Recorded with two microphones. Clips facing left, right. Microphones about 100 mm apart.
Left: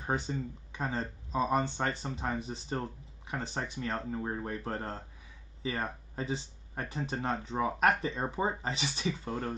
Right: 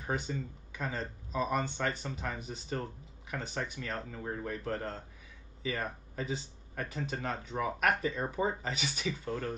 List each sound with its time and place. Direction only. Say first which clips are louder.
0.0 s speech: left 2 dB; 30° left (ahead or behind)